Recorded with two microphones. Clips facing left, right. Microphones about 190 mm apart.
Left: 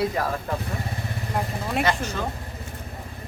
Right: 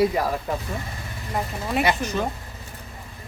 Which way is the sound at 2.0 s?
15° right (ahead or behind).